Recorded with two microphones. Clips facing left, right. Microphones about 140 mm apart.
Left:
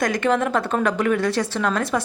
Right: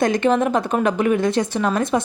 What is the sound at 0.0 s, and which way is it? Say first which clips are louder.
Speech: right 3 dB; 20° right (ahead or behind).